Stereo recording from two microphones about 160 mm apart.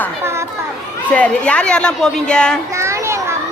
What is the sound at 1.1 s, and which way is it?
A woman's voice, 10° left (ahead or behind).